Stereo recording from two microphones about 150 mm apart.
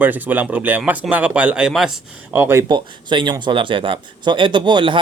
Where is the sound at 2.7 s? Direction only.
30° right (ahead or behind).